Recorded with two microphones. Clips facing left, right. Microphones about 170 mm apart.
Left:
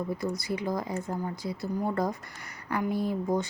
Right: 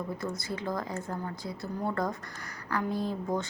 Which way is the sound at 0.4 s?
15° left (ahead or behind).